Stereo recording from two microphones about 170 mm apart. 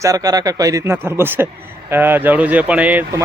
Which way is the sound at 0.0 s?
20° right (ahead or behind).